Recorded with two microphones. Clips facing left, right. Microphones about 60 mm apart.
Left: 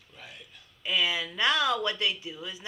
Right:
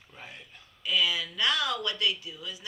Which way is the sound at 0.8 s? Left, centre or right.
Left.